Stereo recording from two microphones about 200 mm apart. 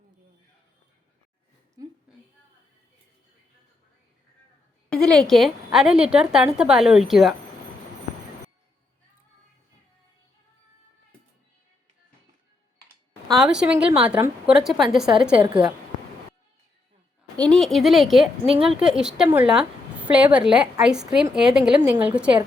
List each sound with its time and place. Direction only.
1.8 s a woman's voice: 20° right (ahead or behind)
4.9 s a woman's voice: centre (ahead or behind)
13.3 s a woman's voice: 5° right (ahead or behind)
17.3 s a woman's voice: 5° left (ahead or behind)